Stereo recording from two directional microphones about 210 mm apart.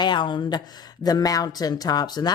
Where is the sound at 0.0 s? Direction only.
20° left (ahead or behind).